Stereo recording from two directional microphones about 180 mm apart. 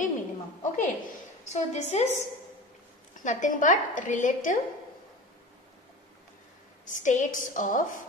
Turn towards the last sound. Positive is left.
turn(degrees=45)  # may be behind; listen again after turning